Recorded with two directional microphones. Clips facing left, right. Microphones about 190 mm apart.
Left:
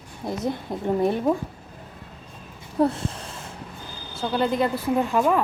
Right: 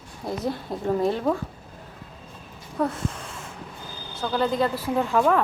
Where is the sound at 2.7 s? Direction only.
30° left (ahead or behind).